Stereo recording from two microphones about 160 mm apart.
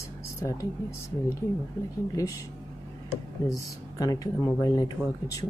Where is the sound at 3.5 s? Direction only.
20° left (ahead or behind).